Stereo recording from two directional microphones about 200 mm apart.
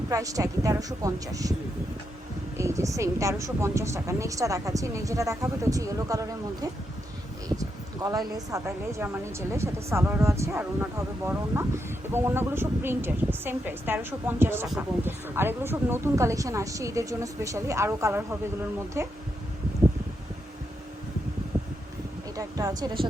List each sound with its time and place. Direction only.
0.1 s speech: 15° right (ahead or behind)
2.6 s speech: 15° right (ahead or behind)
22.4 s speech: 15° right (ahead or behind)